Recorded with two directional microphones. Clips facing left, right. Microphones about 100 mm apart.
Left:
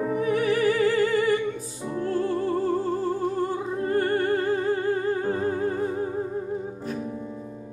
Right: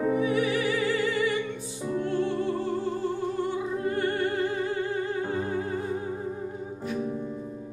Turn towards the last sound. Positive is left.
turn(degrees=40)  # may be behind; listen again after turning